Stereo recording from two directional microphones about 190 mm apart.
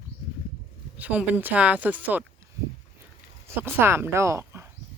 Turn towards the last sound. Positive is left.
turn(degrees=-15)  # may be behind; listen again after turning